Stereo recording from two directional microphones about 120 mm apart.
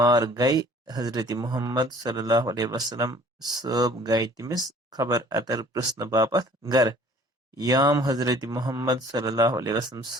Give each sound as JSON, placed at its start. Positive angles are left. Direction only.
{"t": 0.0, "sound": "speech", "side_deg": -30}